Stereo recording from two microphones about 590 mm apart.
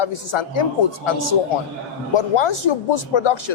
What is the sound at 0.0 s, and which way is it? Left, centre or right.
A woman's voice, left.